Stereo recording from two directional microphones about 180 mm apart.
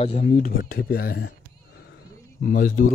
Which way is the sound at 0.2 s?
55° left (ahead or behind).